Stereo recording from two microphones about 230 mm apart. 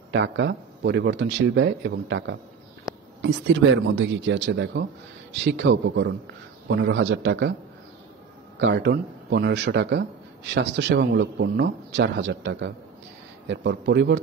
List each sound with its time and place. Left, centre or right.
0.1 s a man's voice: right
8.5 s a man's voice: right